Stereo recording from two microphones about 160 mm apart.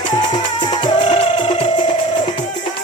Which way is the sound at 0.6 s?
30° left (ahead or behind).